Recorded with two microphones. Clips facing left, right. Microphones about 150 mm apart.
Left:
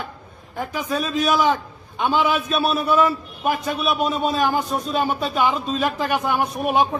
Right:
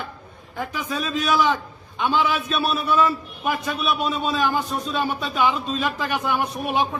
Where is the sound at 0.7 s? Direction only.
45° left (ahead or behind).